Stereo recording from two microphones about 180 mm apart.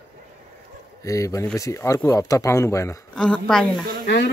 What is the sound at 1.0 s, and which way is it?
Speech, 15° left (ahead or behind).